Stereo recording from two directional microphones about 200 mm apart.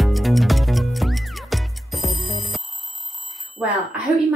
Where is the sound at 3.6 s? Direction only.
5° right (ahead or behind).